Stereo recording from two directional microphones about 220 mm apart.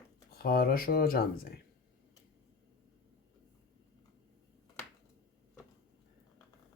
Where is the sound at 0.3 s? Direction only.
40° left (ahead or behind).